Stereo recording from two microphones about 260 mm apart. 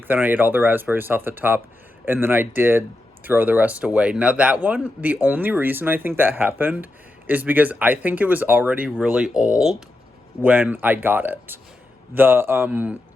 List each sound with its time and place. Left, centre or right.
0.1 s a man's voice: centre